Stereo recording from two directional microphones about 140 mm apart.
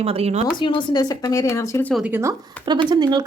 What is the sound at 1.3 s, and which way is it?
Speech, 20° left (ahead or behind).